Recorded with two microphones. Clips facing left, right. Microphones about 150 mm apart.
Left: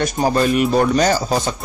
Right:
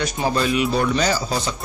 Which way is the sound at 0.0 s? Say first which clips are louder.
Left 4 dB; 50° left (ahead or behind).